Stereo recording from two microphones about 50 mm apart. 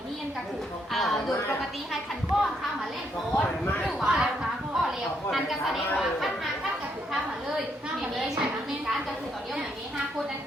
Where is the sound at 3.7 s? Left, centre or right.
Left.